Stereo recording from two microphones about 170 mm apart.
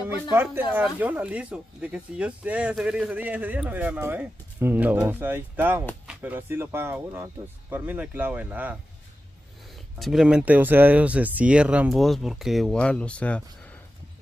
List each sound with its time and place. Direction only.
0.3 s speech: 10° right (ahead or behind)
9.9 s speech: centre (ahead or behind)